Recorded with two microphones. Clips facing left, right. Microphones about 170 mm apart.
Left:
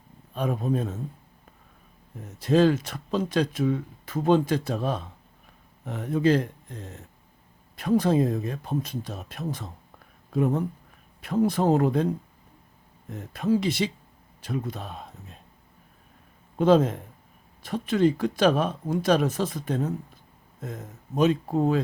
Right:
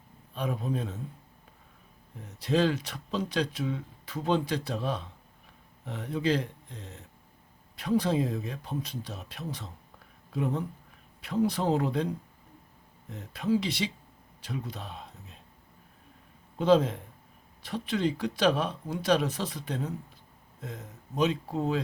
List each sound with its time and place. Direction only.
0.3 s speech: 50° left (ahead or behind)
2.2 s speech: 45° left (ahead or behind)
16.6 s speech: 50° left (ahead or behind)